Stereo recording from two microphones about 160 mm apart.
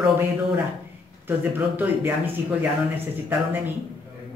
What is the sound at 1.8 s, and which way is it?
Speech, 10° right (ahead or behind).